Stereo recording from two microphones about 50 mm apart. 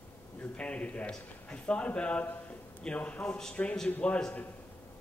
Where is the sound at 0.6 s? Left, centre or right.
Left.